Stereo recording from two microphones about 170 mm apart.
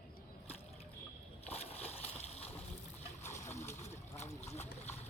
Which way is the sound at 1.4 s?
40° left (ahead or behind).